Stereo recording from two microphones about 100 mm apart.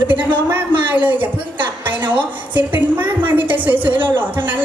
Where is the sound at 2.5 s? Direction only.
15° right (ahead or behind).